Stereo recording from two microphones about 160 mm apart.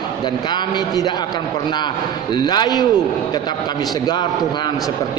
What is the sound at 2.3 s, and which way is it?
Speech, 25° left (ahead or behind).